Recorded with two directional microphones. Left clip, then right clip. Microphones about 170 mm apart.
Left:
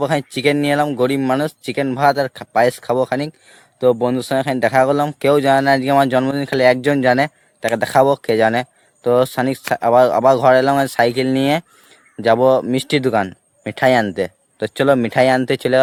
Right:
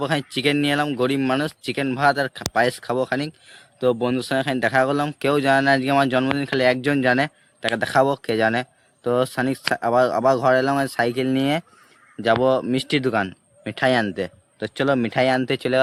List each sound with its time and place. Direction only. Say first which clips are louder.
0.0 s speech: left 5 dB; 50° left (ahead or behind)